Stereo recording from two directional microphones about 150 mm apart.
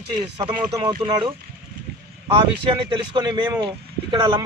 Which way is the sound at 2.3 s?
35° right (ahead or behind).